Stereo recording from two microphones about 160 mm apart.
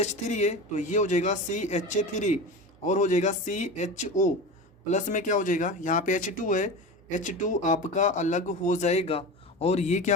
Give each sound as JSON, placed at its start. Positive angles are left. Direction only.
{"t": 0.0, "sound": "speech", "side_deg": 45}